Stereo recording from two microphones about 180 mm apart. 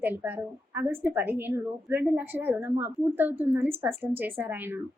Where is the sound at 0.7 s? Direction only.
10° right (ahead or behind).